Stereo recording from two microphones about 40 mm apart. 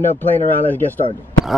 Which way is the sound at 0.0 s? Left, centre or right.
Left.